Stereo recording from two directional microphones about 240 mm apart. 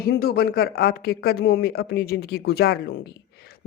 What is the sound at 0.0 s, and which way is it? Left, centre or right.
Speech, left.